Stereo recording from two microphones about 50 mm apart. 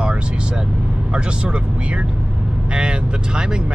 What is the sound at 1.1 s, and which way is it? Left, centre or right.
Speech, right.